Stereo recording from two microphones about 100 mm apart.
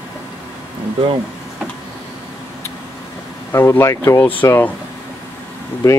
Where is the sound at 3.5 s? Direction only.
25° left (ahead or behind).